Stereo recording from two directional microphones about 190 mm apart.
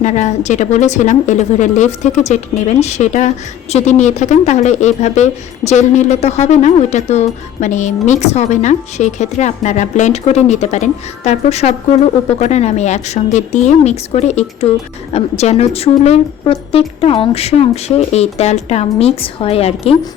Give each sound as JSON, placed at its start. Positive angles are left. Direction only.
{"t": 0.0, "sound": "speech", "side_deg": 40}